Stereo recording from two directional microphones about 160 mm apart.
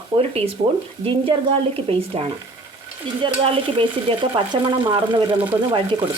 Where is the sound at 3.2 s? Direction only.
30° right (ahead or behind).